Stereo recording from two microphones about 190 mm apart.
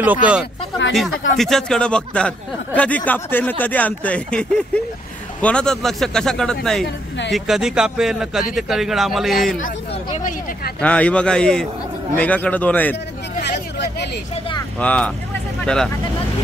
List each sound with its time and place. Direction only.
0.0 s speech: 10° right (ahead or behind)
10.8 s speech: 5° left (ahead or behind)
13.4 s hubbub: 60° left (ahead or behind)
14.8 s speech: 5° left (ahead or behind)